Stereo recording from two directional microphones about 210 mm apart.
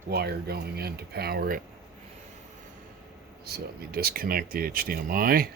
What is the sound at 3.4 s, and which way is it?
Speech, 50° right (ahead or behind).